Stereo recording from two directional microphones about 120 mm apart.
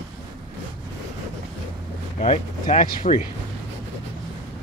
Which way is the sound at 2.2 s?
80° left.